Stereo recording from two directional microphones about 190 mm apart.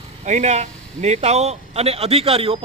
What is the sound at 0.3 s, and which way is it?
A man's voice, 35° right (ahead or behind).